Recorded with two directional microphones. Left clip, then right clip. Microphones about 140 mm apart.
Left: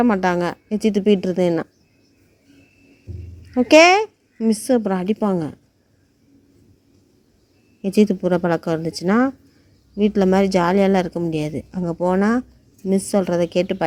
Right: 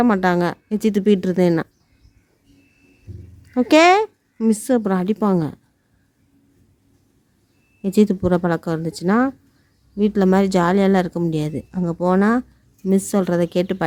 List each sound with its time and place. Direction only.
0.0 s a woman's voice: 35° right (ahead or behind)
3.5 s a woman's voice: 30° right (ahead or behind)
7.8 s speech: 30° right (ahead or behind)
13.1 s a woman's voice: 35° right (ahead or behind)